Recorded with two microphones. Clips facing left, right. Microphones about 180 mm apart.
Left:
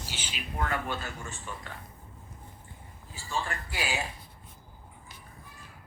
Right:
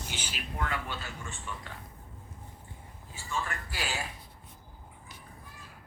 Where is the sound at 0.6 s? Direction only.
45° left (ahead or behind).